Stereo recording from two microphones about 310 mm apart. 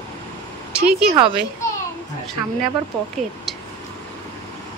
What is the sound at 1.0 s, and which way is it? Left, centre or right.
Speech, centre.